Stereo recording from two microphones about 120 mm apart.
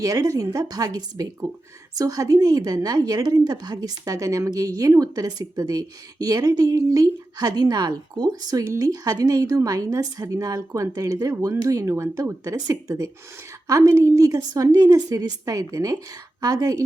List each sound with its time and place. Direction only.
0.0 s a woman's voice: 25° right (ahead or behind)